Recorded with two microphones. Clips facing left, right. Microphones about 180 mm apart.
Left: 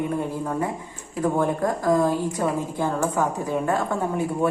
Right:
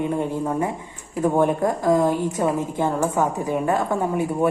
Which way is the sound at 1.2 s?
20° right (ahead or behind).